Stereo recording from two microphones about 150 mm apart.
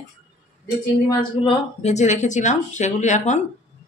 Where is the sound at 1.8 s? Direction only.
50° left (ahead or behind).